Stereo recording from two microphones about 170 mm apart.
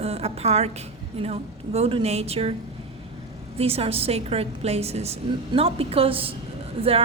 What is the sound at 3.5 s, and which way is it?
Speech, 35° right (ahead or behind).